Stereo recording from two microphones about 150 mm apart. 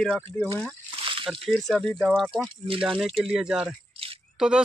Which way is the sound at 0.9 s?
35° right (ahead or behind).